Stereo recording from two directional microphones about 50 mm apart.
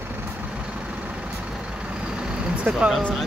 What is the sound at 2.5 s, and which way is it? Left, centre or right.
Speech, right.